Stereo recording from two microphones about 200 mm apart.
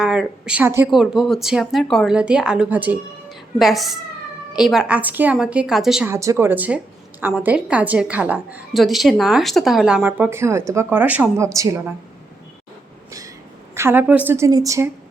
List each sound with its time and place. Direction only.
0.0 s a woman's voice: 5° right (ahead or behind)
13.1 s train: 15° right (ahead or behind)
13.7 s a woman's voice: 10° right (ahead or behind)